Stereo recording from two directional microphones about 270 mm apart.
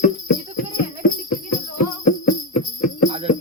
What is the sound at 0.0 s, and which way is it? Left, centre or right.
Clip-clop, left.